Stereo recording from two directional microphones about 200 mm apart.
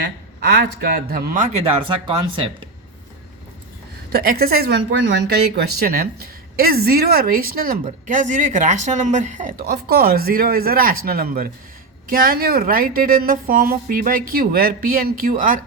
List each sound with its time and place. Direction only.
0.0 s speech: 60° right (ahead or behind); by 2.5 s 25° right (ahead or behind)
4.1 s speech: 50° right (ahead or behind)